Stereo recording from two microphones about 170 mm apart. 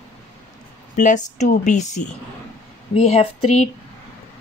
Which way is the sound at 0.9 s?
45° left (ahead or behind).